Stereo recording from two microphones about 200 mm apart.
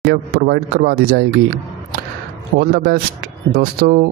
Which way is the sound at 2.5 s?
50° right (ahead or behind).